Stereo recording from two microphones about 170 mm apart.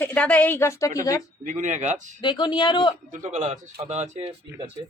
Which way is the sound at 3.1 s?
45° right (ahead or behind).